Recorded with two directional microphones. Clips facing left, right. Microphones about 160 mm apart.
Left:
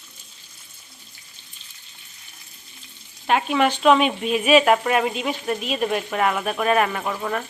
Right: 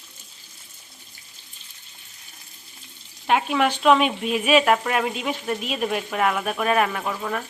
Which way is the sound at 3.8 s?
Centre (ahead or behind).